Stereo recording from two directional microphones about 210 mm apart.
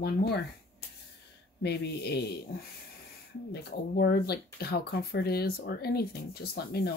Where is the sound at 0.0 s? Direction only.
50° left (ahead or behind).